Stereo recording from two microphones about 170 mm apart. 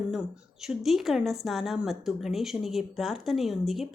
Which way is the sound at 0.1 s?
5° right (ahead or behind).